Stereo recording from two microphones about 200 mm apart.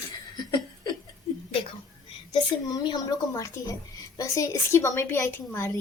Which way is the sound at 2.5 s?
25° left (ahead or behind).